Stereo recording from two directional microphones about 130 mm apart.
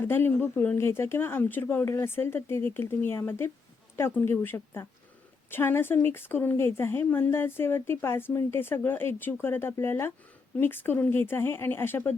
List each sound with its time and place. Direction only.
0.0 s speech: 15° left (ahead or behind)